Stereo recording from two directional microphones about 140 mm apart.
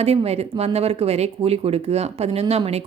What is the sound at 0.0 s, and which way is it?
Speech, 45° right (ahead or behind).